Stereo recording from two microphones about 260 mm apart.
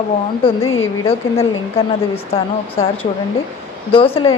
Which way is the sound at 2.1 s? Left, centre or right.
Left.